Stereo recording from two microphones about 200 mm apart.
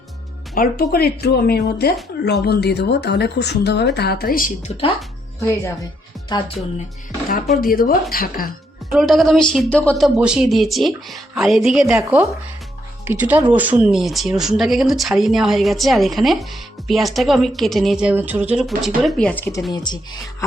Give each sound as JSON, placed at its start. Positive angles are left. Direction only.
{"t": 0.5, "sound": "speech", "side_deg": 45}
{"t": 5.4, "sound": "speech", "side_deg": 15}
{"t": 7.6, "sound": "speech", "side_deg": 45}
{"t": 8.9, "sound": "speech", "side_deg": 0}
{"t": 10.0, "sound": "speech", "side_deg": -5}